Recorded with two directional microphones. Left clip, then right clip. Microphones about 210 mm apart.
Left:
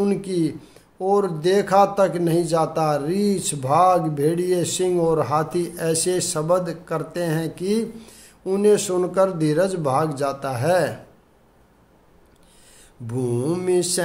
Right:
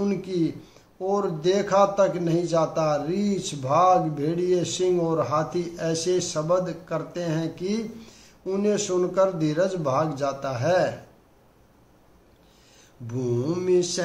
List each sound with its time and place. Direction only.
0.0 s a man's voice: 50° left (ahead or behind)
13.0 s a man's voice: 50° left (ahead or behind)